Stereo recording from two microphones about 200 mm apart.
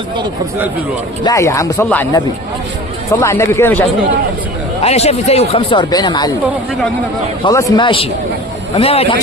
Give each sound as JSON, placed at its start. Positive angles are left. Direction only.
{"t": 1.2, "sound": "speech", "side_deg": 15}
{"t": 4.8, "sound": "speech", "side_deg": 30}
{"t": 7.4, "sound": "speech", "side_deg": 20}